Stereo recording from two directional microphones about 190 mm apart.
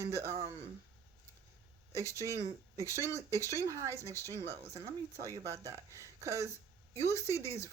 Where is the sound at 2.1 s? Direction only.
15° right (ahead or behind).